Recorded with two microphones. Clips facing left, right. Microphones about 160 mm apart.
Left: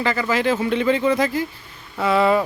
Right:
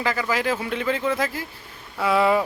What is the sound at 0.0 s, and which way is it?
Speech, 5° right (ahead or behind).